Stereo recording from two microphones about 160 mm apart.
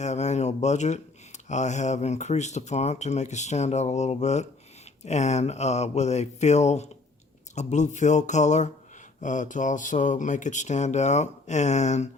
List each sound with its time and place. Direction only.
0.0 s speech: 45° left (ahead or behind)